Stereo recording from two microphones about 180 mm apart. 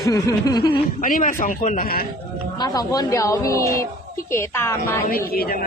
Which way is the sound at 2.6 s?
20° left (ahead or behind).